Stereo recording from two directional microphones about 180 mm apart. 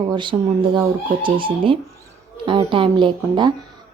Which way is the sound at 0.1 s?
25° right (ahead or behind).